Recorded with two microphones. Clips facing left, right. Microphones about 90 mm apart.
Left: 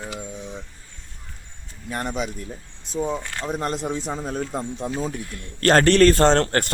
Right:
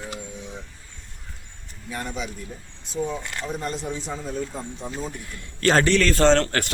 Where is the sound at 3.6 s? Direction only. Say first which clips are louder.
Left 4 dB; 55° left (ahead or behind).